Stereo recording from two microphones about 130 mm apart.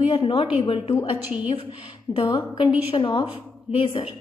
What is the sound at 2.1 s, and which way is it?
A woman's voice, 40° left (ahead or behind).